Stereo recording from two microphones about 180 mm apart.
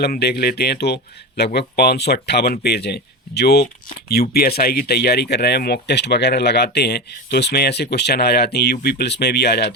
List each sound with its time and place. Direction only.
0.0 s speech: 65° left (ahead or behind)